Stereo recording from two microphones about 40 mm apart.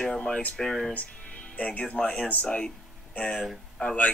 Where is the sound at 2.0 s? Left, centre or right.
Left.